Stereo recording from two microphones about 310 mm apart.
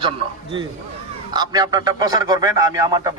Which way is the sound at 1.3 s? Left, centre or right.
Centre.